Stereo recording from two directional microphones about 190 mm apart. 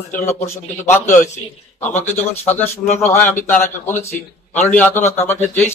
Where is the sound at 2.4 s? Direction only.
10° left (ahead or behind).